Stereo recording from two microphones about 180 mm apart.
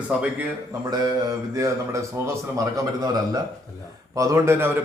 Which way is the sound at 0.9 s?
20° right (ahead or behind).